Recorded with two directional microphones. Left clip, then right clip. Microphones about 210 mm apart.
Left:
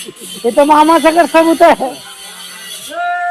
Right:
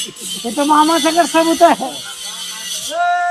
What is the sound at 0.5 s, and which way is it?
Speech, 10° right (ahead or behind).